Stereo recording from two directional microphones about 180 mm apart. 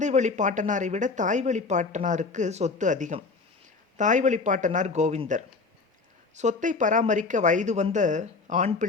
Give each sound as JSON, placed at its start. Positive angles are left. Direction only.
{"t": 0.0, "sound": "speech", "side_deg": -40}